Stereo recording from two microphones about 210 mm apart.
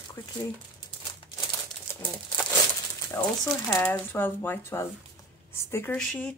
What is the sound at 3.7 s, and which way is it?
Speech, 10° left (ahead or behind).